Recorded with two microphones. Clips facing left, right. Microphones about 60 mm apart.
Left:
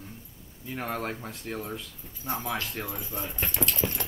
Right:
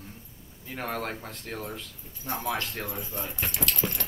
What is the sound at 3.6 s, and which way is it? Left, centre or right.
Clip-clop, left.